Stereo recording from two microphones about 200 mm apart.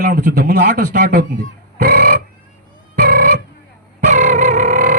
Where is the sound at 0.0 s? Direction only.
45° right (ahead or behind).